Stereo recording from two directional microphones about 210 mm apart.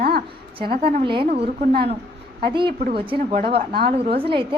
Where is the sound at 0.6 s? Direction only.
25° right (ahead or behind).